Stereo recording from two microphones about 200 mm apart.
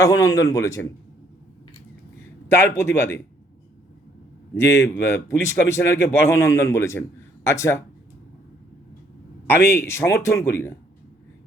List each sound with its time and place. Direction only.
0.0 s speech: 15° left (ahead or behind)
2.5 s speech: 15° left (ahead or behind)
4.5 s speech: 15° left (ahead or behind)
9.5 s speech: 10° left (ahead or behind)